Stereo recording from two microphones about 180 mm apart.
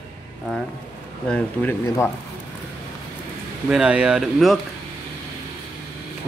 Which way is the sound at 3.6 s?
5° right (ahead or behind).